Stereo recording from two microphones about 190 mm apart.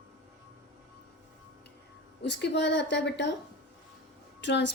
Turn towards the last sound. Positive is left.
turn(degrees=65)  # may be behind; listen again after turning